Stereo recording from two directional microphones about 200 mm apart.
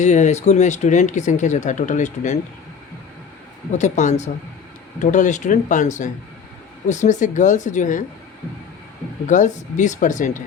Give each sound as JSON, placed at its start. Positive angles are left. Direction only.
{"t": 0.0, "sound": "speech", "side_deg": 35}
{"t": 3.7, "sound": "speech", "side_deg": 35}
{"t": 9.2, "sound": "speech", "side_deg": 40}